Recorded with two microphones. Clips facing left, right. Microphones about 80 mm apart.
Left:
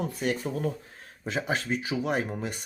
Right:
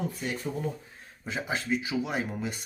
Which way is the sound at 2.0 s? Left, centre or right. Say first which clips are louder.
Left 2 dB; left.